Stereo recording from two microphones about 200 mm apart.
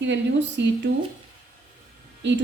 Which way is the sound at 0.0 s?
65° right (ahead or behind).